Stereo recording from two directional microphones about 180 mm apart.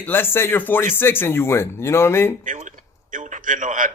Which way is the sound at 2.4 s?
45° right (ahead or behind).